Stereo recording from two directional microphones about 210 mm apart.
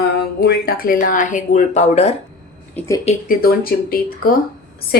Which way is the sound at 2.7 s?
15° left (ahead or behind).